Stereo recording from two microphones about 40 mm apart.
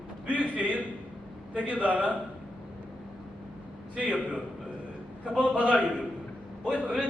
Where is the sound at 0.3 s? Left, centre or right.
Right.